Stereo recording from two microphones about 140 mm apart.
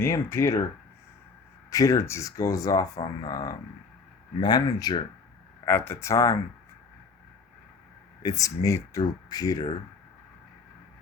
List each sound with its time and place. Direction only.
0.0 s speech: 20° left (ahead or behind)
1.7 s speech: 25° left (ahead or behind)
5.6 s speech: 15° left (ahead or behind)
8.2 s speech: 25° left (ahead or behind)